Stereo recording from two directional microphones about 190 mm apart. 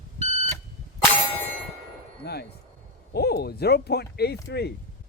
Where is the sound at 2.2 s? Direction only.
55° left (ahead or behind).